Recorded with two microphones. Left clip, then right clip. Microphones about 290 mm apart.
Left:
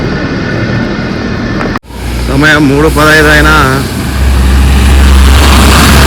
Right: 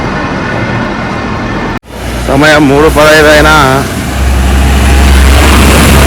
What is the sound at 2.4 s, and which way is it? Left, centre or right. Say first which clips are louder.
Speech: right 1 dB; centre.